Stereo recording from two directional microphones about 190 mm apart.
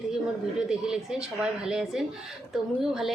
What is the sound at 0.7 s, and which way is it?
Speech, 5° right (ahead or behind).